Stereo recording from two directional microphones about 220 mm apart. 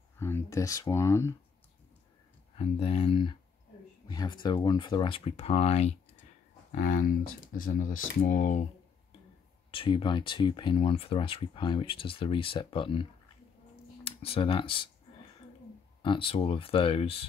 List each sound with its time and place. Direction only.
0.2 s speech: 10° left (ahead or behind)
2.5 s speech: 25° left (ahead or behind)
9.7 s speech: 25° left (ahead or behind)
14.0 s speech: 25° left (ahead or behind)
16.0 s speech: 25° left (ahead or behind)